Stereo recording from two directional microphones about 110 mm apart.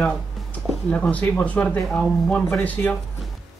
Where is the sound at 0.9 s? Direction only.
10° left (ahead or behind).